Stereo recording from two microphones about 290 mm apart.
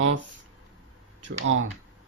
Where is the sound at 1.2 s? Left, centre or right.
Right.